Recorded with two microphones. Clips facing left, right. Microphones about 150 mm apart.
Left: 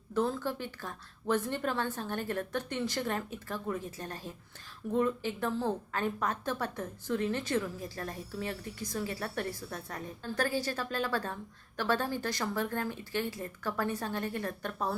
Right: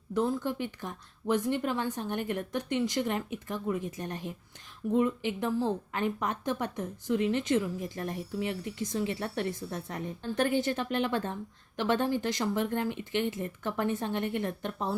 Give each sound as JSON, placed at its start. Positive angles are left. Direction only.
{"t": 0.1, "sound": "a woman's voice", "side_deg": -15}